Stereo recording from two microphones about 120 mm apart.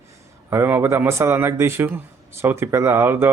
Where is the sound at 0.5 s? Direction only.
20° right (ahead or behind).